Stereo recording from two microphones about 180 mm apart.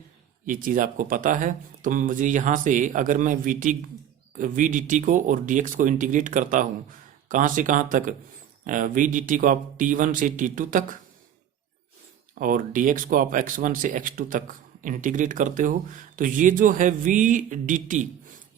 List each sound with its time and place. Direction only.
0.4 s speech: 50° right (ahead or behind)
12.3 s speech: 50° right (ahead or behind)